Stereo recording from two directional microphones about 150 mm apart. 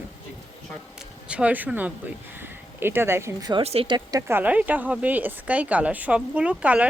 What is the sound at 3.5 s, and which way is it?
Speech, 40° right (ahead or behind).